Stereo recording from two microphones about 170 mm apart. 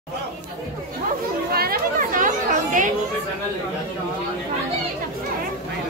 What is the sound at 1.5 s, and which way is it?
Chatter, 65° right (ahead or behind).